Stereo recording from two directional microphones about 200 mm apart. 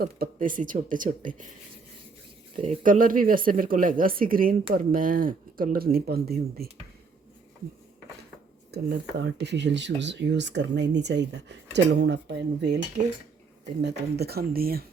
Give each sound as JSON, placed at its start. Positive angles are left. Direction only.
{"t": 0.0, "sound": "speech", "side_deg": -45}
{"t": 2.6, "sound": "speech", "side_deg": -40}
{"t": 8.7, "sound": "speech", "side_deg": -55}
{"t": 13.8, "sound": "speech", "side_deg": -55}